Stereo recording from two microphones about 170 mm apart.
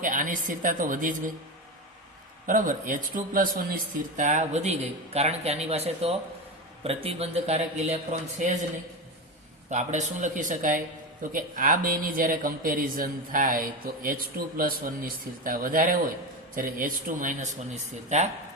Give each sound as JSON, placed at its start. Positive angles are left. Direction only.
{"t": 0.0, "sound": "a man's voice", "side_deg": -50}
{"t": 2.5, "sound": "a man's voice", "side_deg": -50}
{"t": 9.6, "sound": "a man's voice", "side_deg": -45}